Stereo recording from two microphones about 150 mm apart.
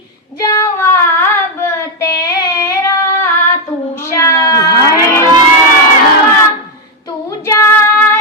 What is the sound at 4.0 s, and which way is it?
Cat, 20° left (ahead or behind).